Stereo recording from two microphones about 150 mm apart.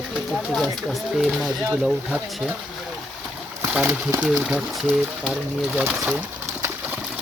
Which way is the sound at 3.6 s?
10° right (ahead or behind).